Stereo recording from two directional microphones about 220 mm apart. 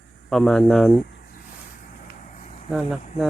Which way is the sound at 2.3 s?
35° left (ahead or behind).